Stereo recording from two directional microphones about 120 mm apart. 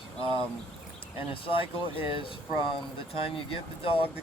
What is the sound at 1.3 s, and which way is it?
Speech, 45° left (ahead or behind).